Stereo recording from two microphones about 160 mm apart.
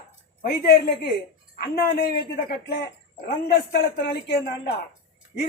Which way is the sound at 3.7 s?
90° left.